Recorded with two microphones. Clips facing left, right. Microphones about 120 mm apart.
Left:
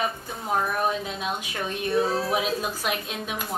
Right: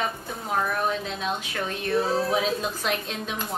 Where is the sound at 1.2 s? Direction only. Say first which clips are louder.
Right 1 dB; 15° left (ahead or behind).